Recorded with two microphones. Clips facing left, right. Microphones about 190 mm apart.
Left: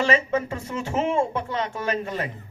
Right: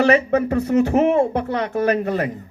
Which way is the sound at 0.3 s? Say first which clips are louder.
Right 10 dB; 60° right (ahead or behind).